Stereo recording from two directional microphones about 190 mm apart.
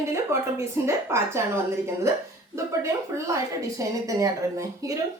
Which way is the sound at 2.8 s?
15° right (ahead or behind).